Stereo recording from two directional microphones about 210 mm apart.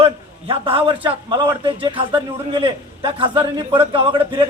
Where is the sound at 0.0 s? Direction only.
25° right (ahead or behind).